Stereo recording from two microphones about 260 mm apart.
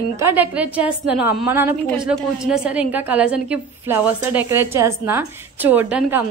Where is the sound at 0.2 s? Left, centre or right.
Centre.